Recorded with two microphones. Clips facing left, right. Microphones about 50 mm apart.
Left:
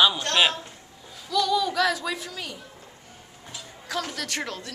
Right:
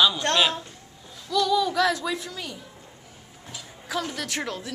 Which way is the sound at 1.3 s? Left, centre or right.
Centre.